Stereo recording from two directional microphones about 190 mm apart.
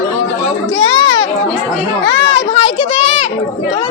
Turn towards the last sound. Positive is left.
turn(degrees=30)  # may be behind; listen again after turning